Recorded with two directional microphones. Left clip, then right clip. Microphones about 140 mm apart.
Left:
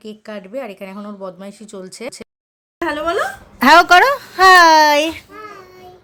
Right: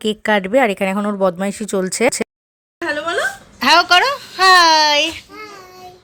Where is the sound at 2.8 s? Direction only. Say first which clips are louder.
Left 1 dB; 90° left.